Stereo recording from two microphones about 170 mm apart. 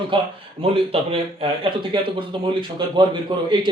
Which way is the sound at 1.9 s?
30° right (ahead or behind).